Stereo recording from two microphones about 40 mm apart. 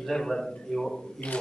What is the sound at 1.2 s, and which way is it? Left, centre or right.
Speech, left.